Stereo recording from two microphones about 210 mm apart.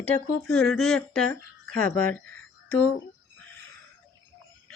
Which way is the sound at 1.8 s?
90° left.